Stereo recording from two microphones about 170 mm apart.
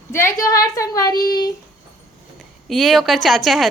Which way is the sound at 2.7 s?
Centre (ahead or behind).